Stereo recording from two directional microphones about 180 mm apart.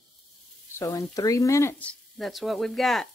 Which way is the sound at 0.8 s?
20° left (ahead or behind).